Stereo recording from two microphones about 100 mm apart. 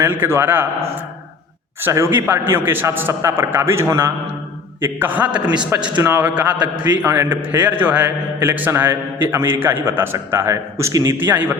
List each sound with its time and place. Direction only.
0.0 s a man's voice: 20° right (ahead or behind)
1.8 s a man's voice: 25° right (ahead or behind)
11.2 s a man's voice: 15° right (ahead or behind)